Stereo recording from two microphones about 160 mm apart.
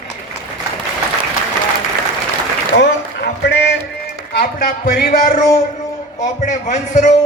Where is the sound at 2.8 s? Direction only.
90° left.